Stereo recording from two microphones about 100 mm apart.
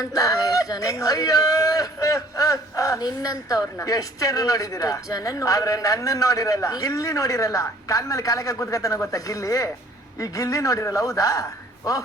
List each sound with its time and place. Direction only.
0.0 s speech: 35° left (ahead or behind)